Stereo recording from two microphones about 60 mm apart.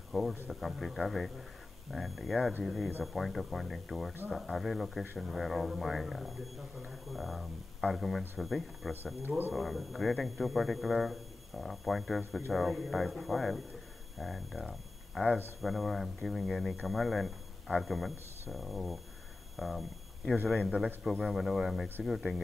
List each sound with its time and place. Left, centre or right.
0.1 s speech: centre
19.5 s a sound: centre
20.4 s speech: centre